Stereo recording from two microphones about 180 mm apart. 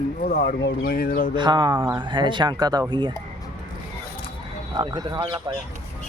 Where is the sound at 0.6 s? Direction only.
60° left (ahead or behind).